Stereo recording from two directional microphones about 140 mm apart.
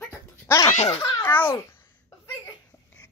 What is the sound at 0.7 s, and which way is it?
Speech, 50° left (ahead or behind).